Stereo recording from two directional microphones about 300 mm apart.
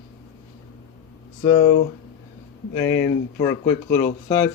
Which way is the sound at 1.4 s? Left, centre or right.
Centre.